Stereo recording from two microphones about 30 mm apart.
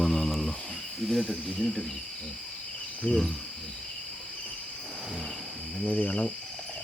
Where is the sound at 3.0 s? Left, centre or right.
Left.